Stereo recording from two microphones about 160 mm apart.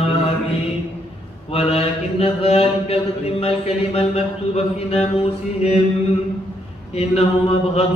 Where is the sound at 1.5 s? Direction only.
40° left (ahead or behind).